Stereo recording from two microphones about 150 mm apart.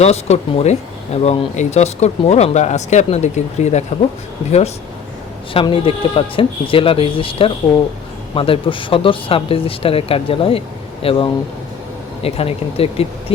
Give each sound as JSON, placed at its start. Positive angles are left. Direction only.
{"t": 0.0, "sound": "speech", "side_deg": 45}
{"t": 5.5, "sound": "speech", "side_deg": 35}